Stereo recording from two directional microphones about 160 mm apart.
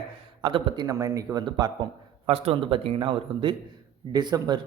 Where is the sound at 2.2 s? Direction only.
40° right (ahead or behind).